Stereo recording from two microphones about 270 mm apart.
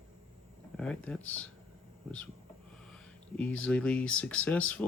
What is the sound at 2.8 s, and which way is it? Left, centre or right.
Speech, centre.